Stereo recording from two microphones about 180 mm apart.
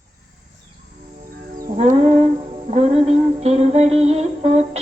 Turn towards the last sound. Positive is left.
turn(degrees=-35)  # may be behind; listen again after turning